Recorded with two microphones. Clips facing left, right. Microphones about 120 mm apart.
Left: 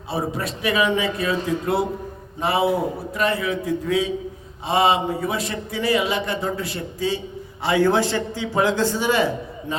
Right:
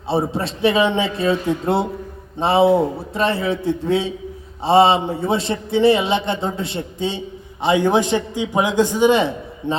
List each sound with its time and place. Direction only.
0.1 s a man's voice: 30° right (ahead or behind)